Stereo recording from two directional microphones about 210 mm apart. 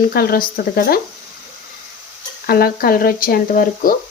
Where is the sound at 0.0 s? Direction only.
45° left (ahead or behind).